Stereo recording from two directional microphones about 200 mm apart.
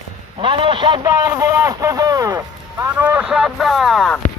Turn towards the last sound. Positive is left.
turn(degrees=0)  # may be behind; listen again after turning